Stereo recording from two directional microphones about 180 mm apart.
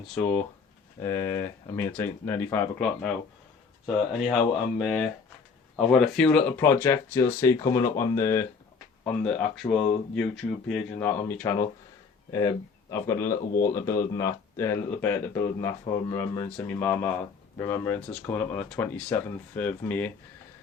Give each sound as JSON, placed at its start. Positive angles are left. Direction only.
{"t": 0.1, "sound": "speech", "side_deg": 10}